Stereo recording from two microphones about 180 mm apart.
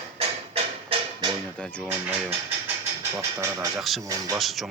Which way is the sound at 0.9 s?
30° right (ahead or behind).